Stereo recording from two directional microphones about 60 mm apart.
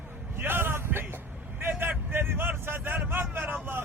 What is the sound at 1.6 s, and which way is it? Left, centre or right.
Vehicle, right.